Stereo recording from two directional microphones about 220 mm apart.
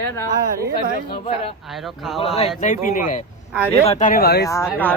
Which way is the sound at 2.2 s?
25° left (ahead or behind).